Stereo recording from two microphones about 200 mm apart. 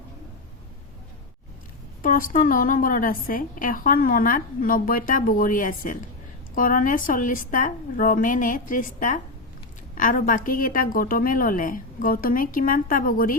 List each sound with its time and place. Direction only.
2.0 s a woman's voice: 45° left (ahead or behind)